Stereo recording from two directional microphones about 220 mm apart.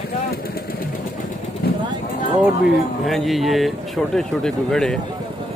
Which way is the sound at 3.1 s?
Centre (ahead or behind).